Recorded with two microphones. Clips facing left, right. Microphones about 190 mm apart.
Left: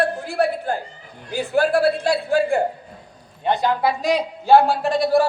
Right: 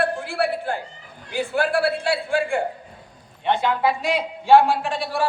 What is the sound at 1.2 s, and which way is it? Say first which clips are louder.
A man's voice: left 3 dB; 40° left (ahead or behind).